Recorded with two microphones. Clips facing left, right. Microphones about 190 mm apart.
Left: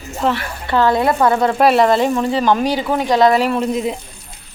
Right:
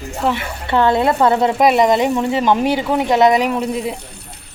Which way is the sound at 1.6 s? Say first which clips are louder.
Left 1 dB; 15° right (ahead or behind).